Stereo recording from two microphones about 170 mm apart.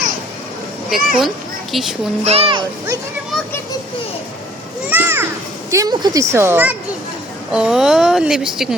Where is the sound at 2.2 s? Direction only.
35° right (ahead or behind).